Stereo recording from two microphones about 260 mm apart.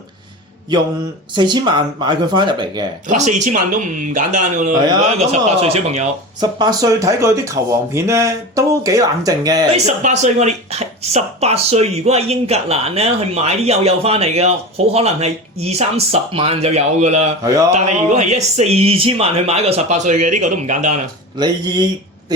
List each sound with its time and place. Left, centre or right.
1.4 s speech: centre
9.7 s speech: right
21.4 s speech: centre